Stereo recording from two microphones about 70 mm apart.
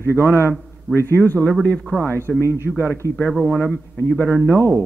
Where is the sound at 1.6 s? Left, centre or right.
Centre.